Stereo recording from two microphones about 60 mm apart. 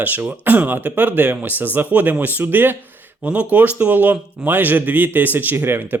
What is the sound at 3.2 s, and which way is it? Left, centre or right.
A man's voice, right.